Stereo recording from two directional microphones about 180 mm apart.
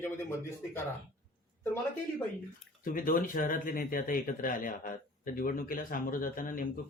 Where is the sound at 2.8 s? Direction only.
50° left (ahead or behind).